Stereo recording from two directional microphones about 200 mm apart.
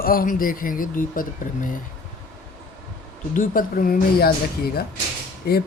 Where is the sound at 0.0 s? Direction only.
45° left (ahead or behind).